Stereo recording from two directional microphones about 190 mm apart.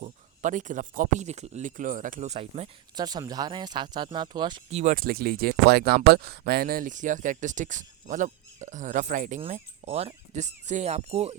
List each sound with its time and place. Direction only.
0.0 s speech: 40° right (ahead or behind)
2.9 s speech: 20° right (ahead or behind)
4.7 s speech: 40° right (ahead or behind)